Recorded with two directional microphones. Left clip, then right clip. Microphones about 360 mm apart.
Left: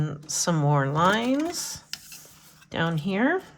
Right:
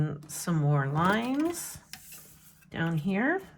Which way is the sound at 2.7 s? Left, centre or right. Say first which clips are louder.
Left 5 dB; centre.